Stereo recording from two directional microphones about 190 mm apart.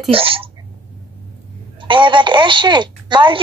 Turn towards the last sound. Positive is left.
turn(degrees=-25)  # may be behind; listen again after turning